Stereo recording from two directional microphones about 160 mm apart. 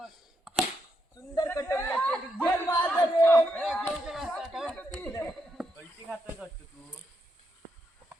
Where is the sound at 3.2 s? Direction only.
10° left (ahead or behind).